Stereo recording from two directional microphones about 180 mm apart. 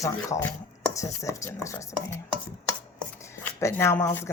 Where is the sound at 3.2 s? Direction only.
15° left (ahead or behind).